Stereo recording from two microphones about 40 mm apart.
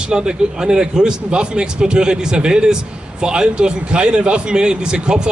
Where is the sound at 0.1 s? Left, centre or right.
Centre.